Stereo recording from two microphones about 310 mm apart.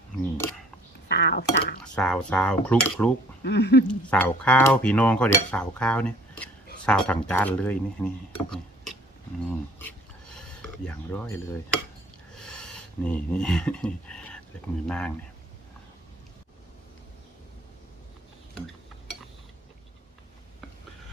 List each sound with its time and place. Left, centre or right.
1.0 s speech: left
1.8 s cutlery: centre
3.4 s speech: left
3.8 s cutlery: centre
9.5 s speech: centre
12.3 s a sound: centre
14.8 s cutlery: centre